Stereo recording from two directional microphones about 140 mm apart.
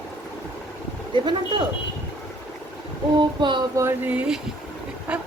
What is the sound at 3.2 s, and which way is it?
Speech, 35° right (ahead or behind).